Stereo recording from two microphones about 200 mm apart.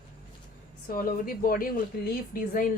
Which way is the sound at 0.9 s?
45° left (ahead or behind).